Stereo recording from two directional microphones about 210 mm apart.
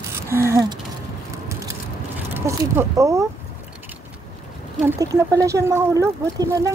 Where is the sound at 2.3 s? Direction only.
10° right (ahead or behind).